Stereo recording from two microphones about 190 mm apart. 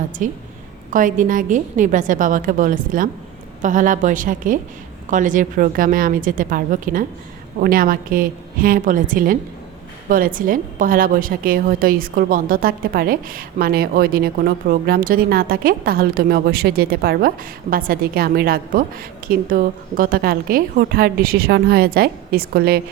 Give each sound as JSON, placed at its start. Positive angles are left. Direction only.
{"t": 0.2, "sound": "a woman's voice", "side_deg": -45}